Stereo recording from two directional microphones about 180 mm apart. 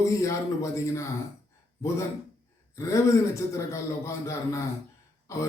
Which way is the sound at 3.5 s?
15° left (ahead or behind).